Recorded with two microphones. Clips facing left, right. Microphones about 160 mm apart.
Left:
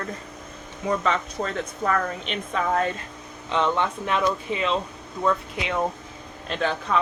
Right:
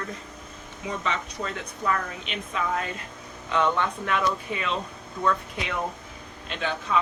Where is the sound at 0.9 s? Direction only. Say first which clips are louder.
Left 6 dB; 50° left (ahead or behind).